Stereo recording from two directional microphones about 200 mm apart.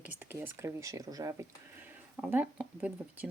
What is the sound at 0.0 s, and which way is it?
Speech, 10° right (ahead or behind).